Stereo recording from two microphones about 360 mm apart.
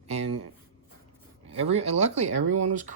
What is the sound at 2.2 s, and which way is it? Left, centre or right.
Speech, right.